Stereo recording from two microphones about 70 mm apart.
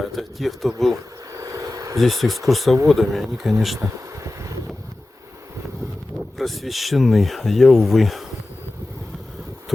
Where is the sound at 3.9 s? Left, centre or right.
Right.